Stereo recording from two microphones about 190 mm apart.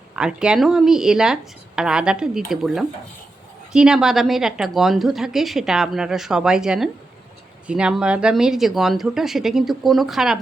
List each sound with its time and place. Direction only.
0.2 s a woman's voice: 5° right (ahead or behind)